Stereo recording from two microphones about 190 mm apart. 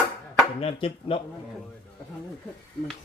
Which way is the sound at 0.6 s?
30° left (ahead or behind).